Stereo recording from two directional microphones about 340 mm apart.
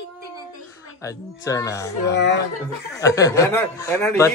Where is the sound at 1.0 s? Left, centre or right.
Centre.